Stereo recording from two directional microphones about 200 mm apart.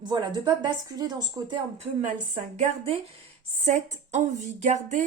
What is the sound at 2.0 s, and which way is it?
Speech, 35° right (ahead or behind).